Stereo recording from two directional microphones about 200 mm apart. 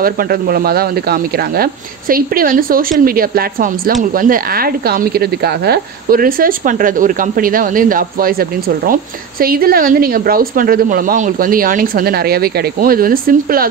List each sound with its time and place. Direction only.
0.0 s speech: 45° right (ahead or behind)